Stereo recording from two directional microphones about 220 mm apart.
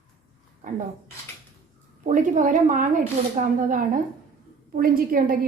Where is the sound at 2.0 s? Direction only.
35° right (ahead or behind).